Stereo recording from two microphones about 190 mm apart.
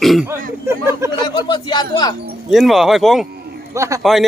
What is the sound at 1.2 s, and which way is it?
Speech, 25° left (ahead or behind).